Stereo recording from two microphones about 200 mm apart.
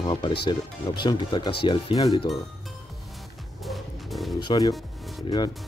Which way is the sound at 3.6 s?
Centre (ahead or behind).